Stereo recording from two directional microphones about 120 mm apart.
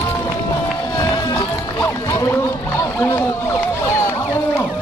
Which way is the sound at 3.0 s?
15° left (ahead or behind).